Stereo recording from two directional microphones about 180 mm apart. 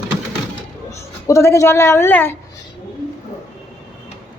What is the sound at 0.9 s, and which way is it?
Speech, 15° left (ahead or behind).